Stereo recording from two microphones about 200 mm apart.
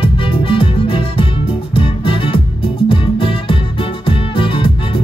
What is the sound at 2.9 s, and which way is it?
Music, 25° left (ahead or behind).